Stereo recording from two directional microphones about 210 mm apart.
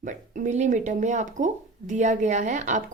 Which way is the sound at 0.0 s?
35° right (ahead or behind).